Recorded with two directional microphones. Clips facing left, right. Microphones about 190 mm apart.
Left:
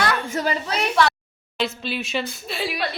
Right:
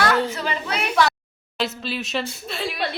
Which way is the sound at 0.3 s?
40° left (ahead or behind).